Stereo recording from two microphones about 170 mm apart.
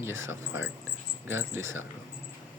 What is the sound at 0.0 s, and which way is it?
Speech, 15° right (ahead or behind).